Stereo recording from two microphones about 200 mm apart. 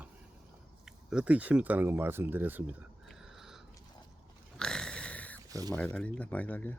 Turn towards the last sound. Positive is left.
turn(degrees=10)  # may be behind; listen again after turning